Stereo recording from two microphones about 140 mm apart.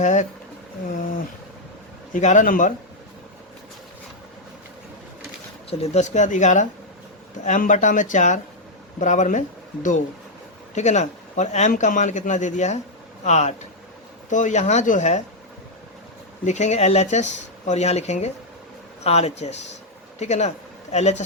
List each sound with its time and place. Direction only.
0.0 s speech: 60° left (ahead or behind)
2.1 s a man's voice: 65° left (ahead or behind)
5.7 s speech: 50° left (ahead or behind)
10.8 s speech: 55° left (ahead or behind)
16.4 s speech: 55° left (ahead or behind)